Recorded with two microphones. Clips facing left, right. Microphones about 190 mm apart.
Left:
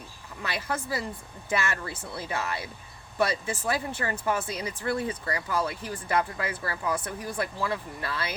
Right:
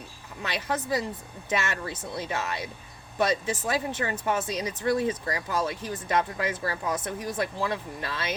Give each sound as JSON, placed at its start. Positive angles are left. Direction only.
{"t": 0.4, "sound": "speech", "side_deg": -20}